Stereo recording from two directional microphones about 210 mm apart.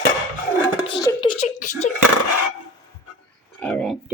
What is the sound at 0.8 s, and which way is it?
Speech, 25° left (ahead or behind).